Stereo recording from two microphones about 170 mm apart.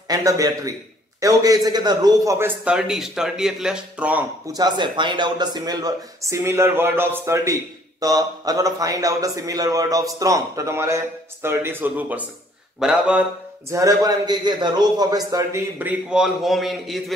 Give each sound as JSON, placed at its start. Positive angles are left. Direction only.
{"t": 0.1, "sound": "a man's voice", "side_deg": -20}
{"t": 4.6, "sound": "a man's voice", "side_deg": -25}
{"t": 15.8, "sound": "a man's voice", "side_deg": -5}